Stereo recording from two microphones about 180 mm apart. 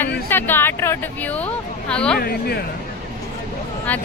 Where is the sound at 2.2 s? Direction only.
60° left (ahead or behind).